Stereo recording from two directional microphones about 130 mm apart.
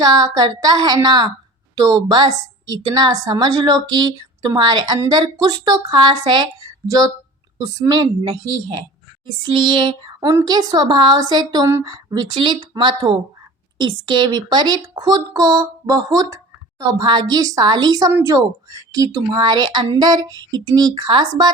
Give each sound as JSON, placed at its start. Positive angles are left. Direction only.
{"t": 0.0, "sound": "a woman's voice", "side_deg": -30}
{"t": 19.4, "sound": "a woman's voice", "side_deg": -35}